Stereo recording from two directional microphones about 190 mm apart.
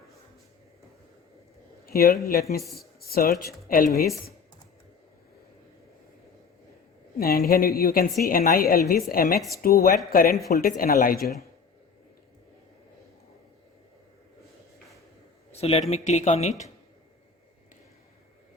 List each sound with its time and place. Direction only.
1.9 s speech: 55° left (ahead or behind)
2.7 s a sound: 55° left (ahead or behind)
3.7 s speech: 45° left (ahead or behind)
4.0 s speech: centre (ahead or behind)
7.2 s a woman's voice: 50° left (ahead or behind)
15.5 s speech: 30° left (ahead or behind)